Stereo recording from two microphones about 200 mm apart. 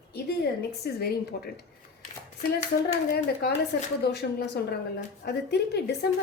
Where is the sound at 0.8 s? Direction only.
50° left (ahead or behind).